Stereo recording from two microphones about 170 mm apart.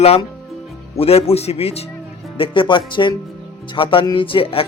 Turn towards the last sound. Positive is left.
turn(degrees=35)  # may be behind; listen again after turning